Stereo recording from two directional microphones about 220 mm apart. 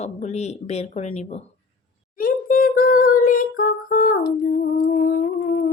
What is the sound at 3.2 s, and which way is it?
Singing, 40° left (ahead or behind).